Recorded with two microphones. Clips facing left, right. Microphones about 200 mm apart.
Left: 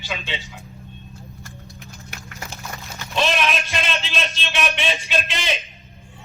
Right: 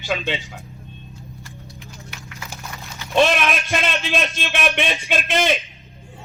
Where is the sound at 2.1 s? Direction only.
45° left (ahead or behind).